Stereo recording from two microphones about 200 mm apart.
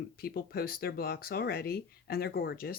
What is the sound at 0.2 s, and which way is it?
Speech, 50° left (ahead or behind).